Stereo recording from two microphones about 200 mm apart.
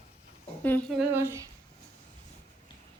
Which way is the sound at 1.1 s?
15° right (ahead or behind).